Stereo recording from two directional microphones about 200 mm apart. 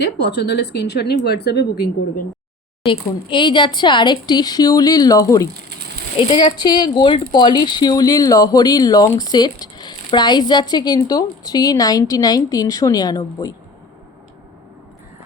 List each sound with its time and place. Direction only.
0.0 s speech: 55° left (ahead or behind)
2.8 s speech: 25° left (ahead or behind)